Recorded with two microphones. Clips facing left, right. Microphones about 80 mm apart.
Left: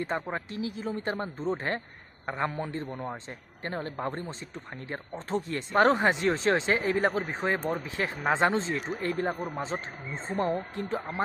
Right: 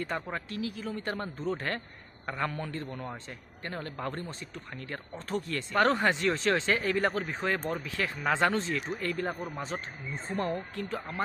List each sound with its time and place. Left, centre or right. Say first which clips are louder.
0.0 s speech: left 3 dB; left